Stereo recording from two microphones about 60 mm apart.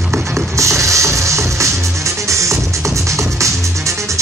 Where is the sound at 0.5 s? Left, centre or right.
Right.